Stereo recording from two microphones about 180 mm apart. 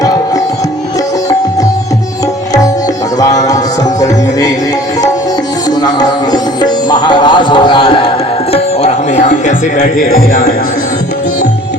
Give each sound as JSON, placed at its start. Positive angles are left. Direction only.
{"t": 3.2, "sound": "music", "side_deg": 20}
{"t": 5.8, "sound": "music", "side_deg": 20}